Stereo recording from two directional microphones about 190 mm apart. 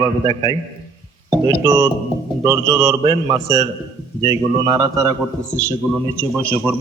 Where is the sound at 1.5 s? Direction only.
20° right (ahead or behind).